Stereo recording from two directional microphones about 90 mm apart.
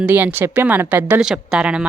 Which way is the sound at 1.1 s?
5° right (ahead or behind).